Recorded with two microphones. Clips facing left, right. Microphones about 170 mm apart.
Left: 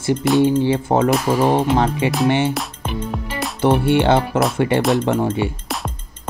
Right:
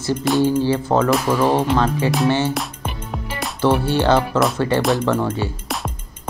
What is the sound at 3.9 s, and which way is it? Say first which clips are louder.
Speech: left 1 dB; 25° left (ahead or behind).